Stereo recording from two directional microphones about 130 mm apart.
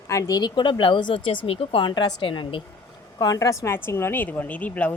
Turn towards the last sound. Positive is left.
turn(degrees=10)  # may be behind; listen again after turning